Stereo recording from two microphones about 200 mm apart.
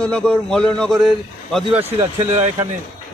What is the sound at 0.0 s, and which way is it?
Speech, 5° left (ahead or behind).